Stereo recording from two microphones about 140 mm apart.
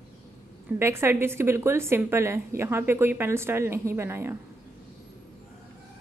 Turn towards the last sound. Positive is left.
turn(degrees=-15)  # may be behind; listen again after turning